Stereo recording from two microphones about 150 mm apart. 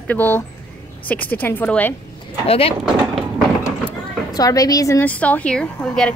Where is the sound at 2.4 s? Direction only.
40° left (ahead or behind).